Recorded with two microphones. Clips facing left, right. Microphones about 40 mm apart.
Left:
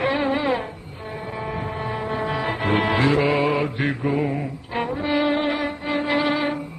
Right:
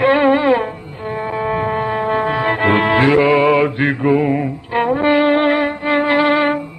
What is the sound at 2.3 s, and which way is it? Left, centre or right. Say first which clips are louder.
Music: right 6 dB; right.